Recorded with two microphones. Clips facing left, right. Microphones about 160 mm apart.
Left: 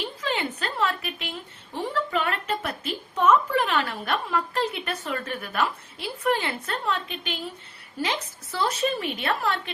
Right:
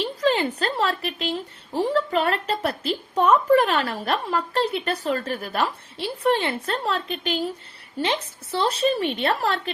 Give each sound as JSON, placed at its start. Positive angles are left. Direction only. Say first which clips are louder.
{"t": 0.0, "sound": "a woman's voice", "louder": "right 7 dB", "side_deg": -35}
{"t": 7.9, "sound": "a woman's voice", "louder": "right 4 dB", "side_deg": -25}